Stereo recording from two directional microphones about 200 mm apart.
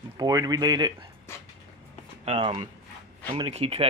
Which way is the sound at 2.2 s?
30° right (ahead or behind).